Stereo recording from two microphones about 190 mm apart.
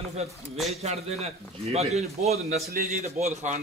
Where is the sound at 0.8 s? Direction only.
35° right (ahead or behind).